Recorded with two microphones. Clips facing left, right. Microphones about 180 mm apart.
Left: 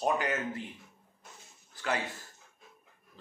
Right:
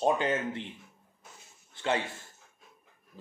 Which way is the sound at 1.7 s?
25° right (ahead or behind).